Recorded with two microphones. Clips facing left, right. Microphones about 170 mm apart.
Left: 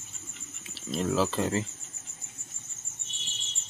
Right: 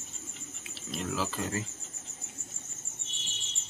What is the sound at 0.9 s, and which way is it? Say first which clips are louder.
Speech: left 7 dB; 30° left (ahead or behind).